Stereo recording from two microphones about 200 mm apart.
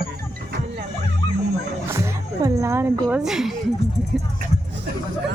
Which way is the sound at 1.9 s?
15° right (ahead or behind).